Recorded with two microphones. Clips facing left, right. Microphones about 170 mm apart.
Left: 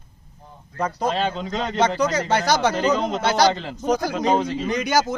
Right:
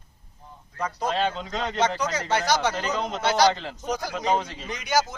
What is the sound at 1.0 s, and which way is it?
A man's voice, 35° left (ahead or behind).